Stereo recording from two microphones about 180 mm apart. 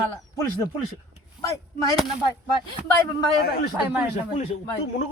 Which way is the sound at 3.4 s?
55° left (ahead or behind).